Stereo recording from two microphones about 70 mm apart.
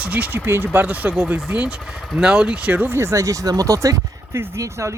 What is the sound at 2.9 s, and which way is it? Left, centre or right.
Speech, right.